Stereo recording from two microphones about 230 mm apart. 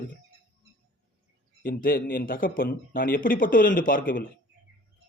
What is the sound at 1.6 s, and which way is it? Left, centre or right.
A man's voice, left.